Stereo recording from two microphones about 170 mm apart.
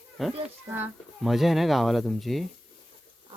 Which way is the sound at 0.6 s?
15° right (ahead or behind).